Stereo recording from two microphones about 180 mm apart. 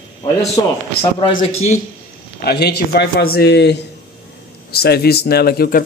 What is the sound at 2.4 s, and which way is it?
A man's voice, 65° left (ahead or behind).